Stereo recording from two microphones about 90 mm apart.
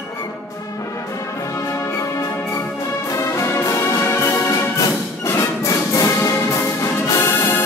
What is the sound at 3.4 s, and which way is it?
Music, 35° left (ahead or behind).